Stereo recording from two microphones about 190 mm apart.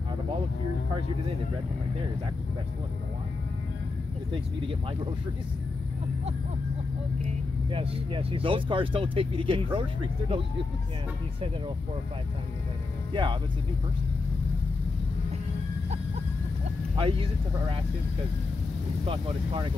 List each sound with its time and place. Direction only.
7.7 s speech: 30° right (ahead or behind)
13.1 s speech: 25° right (ahead or behind)
16.9 s speech: 30° right (ahead or behind)
19.0 s speech: 25° right (ahead or behind)